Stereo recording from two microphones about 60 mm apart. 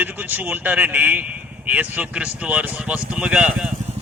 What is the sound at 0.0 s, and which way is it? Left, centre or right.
Speech, right.